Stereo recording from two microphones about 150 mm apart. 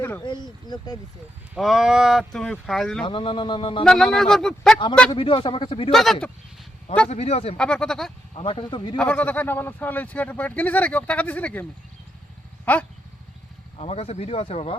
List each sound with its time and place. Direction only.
0.2 s speech: 30° left (ahead or behind)
1.5 s speech: centre (ahead or behind)
3.0 s speech: 35° left (ahead or behind)
3.8 s speech: 5° left (ahead or behind)
5.1 s speech: 35° left (ahead or behind)
5.9 s speech: centre (ahead or behind)
7.1 s speech: 45° left (ahead or behind)
7.5 s speech: 5° left (ahead or behind)
8.4 s speech: 35° left (ahead or behind)
9.0 s speech: 10° left (ahead or behind)
12.7 s speech: 10° left (ahead or behind)
13.7 s speech: 40° left (ahead or behind)